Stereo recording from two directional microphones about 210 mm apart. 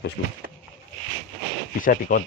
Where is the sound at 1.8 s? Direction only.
45° left (ahead or behind).